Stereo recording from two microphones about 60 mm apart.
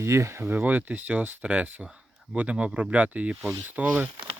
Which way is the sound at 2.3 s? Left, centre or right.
Right.